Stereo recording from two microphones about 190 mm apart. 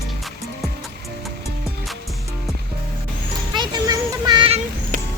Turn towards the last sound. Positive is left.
turn(degrees=-45)  # may be behind; listen again after turning